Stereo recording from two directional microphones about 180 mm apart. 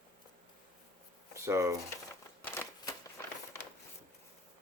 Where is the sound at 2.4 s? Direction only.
15° left (ahead or behind).